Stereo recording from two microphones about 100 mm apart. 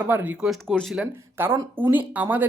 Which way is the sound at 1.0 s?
20° right (ahead or behind).